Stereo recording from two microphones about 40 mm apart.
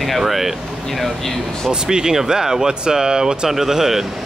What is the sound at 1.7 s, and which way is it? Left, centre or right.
Speech, centre.